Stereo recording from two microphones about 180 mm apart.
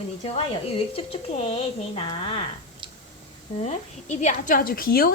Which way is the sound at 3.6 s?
40° left (ahead or behind).